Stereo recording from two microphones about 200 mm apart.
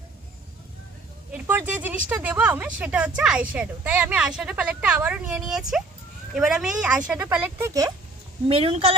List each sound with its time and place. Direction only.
1.3 s speech: 10° right (ahead or behind)
8.4 s a woman's voice: 30° right (ahead or behind)